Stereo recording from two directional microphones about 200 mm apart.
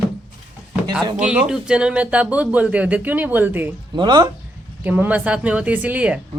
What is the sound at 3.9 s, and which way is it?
Speech, 20° right (ahead or behind).